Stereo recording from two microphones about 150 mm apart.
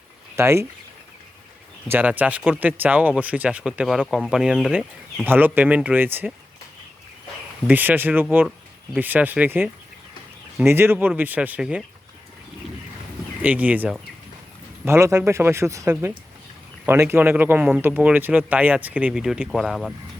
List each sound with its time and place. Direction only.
0.3 s speech: 20° right (ahead or behind)
1.9 s speech: 10° right (ahead or behind)
5.2 s speech: 15° right (ahead or behind)
7.7 s speech: 10° right (ahead or behind)
13.4 s speech: 10° right (ahead or behind)